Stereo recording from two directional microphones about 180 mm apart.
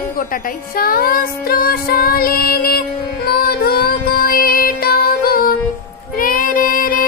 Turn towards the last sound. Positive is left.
turn(degrees=55)  # may be behind; listen again after turning